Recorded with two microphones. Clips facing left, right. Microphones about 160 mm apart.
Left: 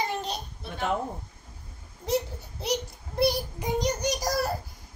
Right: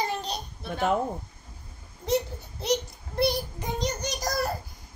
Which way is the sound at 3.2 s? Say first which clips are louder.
Left 1 dB; 10° left (ahead or behind).